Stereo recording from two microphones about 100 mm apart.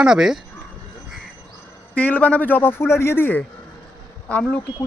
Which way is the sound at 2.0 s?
15° left (ahead or behind).